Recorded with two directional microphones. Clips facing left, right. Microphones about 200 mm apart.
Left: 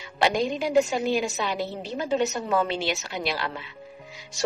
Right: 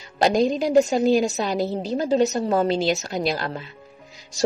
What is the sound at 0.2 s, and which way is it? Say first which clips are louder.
A woman's voice: right 5 dB; 40° right (ahead or behind).